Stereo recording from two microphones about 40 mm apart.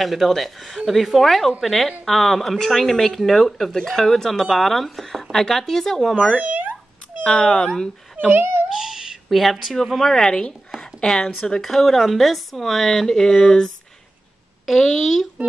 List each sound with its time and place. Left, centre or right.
0.0 s speech: centre
6.3 s a sound: right
7.2 s speech: left
8.3 s speech: right
8.7 s cat: centre
9.3 s speech: centre
10.8 s a sound: centre
11.6 s speech: centre
14.7 s speech: centre